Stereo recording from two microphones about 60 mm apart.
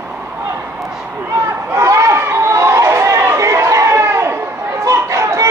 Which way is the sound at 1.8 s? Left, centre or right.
Right.